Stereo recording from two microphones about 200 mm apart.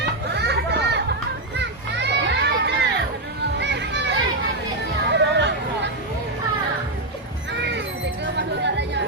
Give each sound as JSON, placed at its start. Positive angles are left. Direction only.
{"t": 0.3, "sound": "children playing", "side_deg": -55}
{"t": 1.5, "sound": "a sound", "side_deg": -60}
{"t": 3.6, "sound": "children playing", "side_deg": -60}
{"t": 5.1, "sound": "hubbub", "side_deg": -60}
{"t": 8.2, "sound": "chatter", "side_deg": -60}